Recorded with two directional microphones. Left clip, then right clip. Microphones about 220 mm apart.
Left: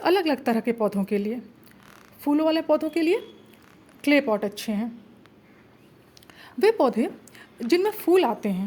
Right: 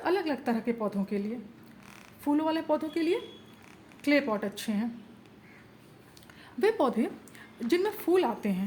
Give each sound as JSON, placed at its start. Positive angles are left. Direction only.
{"t": 0.0, "sound": "a woman's voice", "side_deg": 40}
{"t": 6.4, "sound": "a woman's voice", "side_deg": 25}